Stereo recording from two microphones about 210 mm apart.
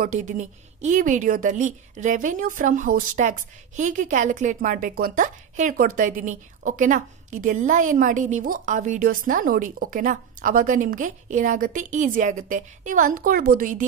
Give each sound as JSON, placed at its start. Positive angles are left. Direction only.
{"t": 0.0, "sound": "a woman's voice", "side_deg": -35}